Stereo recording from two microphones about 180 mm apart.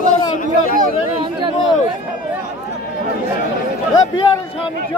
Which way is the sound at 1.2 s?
30° right (ahead or behind).